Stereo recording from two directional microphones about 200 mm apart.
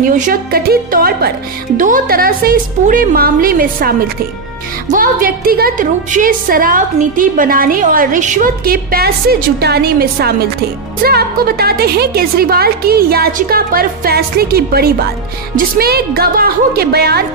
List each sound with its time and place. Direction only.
0.0 s a woman's voice: 40° right (ahead or behind)
4.9 s a woman's voice: 45° right (ahead or behind)